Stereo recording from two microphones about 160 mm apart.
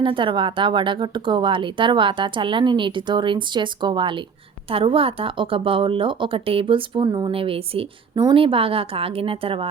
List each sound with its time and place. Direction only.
0.0 s speech: 30° right (ahead or behind)